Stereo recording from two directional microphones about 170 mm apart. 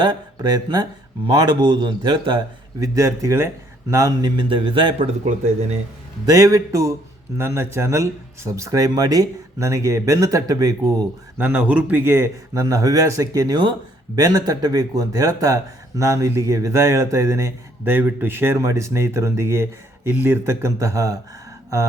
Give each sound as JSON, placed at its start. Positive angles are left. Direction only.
{"t": 0.0, "sound": "speech", "side_deg": -25}
{"t": 6.2, "sound": "speech", "side_deg": -20}
{"t": 11.3, "sound": "speech", "side_deg": -10}